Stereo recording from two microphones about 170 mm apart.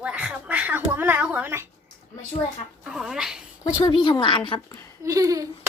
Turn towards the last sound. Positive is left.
turn(degrees=-20)  # may be behind; listen again after turning